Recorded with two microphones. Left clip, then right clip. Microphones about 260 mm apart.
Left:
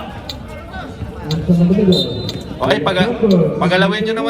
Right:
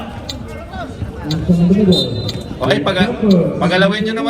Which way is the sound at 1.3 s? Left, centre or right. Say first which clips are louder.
Even; left.